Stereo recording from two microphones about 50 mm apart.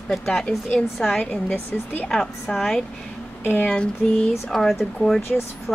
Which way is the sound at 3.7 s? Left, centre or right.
Centre.